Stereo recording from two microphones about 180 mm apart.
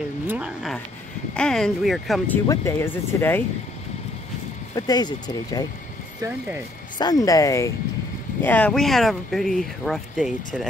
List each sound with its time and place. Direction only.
0.3 s speech: 5° right (ahead or behind)
2.4 s speech: 15° left (ahead or behind)
4.7 s speech: 20° left (ahead or behind)
7.0 s speech: 20° left (ahead or behind); by 10.7 s centre (ahead or behind)